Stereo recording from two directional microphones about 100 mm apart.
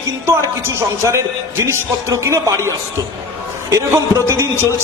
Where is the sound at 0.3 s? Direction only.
25° right (ahead or behind).